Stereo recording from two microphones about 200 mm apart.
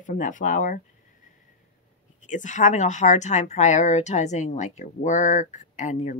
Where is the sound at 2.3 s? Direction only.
40° left (ahead or behind).